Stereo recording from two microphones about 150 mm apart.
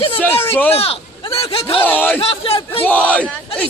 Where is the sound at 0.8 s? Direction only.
40° left (ahead or behind).